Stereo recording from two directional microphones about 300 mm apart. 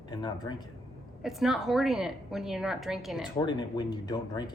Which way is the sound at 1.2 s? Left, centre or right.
Centre.